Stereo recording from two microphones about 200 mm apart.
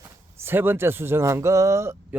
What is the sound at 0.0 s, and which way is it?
Speech, 10° right (ahead or behind).